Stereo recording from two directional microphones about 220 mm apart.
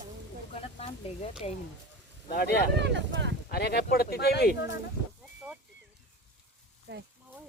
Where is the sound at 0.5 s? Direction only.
25° left (ahead or behind).